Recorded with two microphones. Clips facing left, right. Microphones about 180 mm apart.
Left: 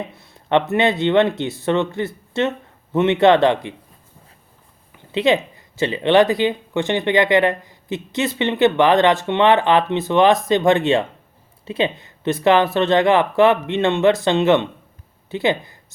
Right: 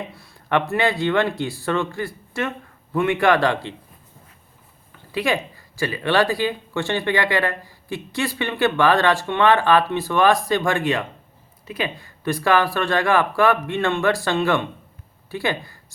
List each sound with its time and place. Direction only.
0.1 s speech: 20° left (ahead or behind)
5.1 s speech: 20° left (ahead or behind)